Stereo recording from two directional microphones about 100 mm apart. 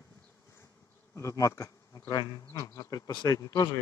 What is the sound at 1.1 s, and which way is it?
Speech, 30° left (ahead or behind).